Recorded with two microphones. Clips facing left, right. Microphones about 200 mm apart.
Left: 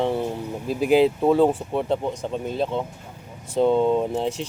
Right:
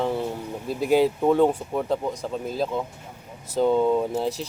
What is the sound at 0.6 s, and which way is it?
Speech, 10° left (ahead or behind).